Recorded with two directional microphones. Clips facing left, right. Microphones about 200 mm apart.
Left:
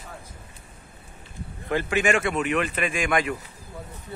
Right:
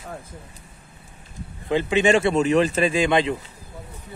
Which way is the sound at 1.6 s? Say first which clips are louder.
Right 4 dB; 20° right (ahead or behind).